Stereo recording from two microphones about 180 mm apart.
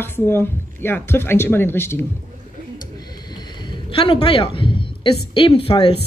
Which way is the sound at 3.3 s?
25° left (ahead or behind).